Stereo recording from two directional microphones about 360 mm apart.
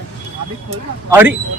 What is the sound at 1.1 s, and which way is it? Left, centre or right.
Speech, centre.